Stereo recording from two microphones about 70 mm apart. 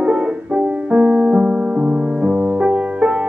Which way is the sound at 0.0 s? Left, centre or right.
Centre.